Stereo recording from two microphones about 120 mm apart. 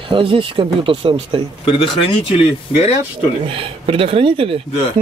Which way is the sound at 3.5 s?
50° right (ahead or behind).